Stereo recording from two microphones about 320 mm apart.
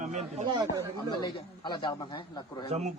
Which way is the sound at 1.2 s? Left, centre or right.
Centre.